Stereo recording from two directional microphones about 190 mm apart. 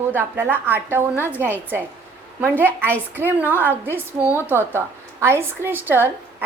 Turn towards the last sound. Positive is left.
turn(degrees=-10)  # may be behind; listen again after turning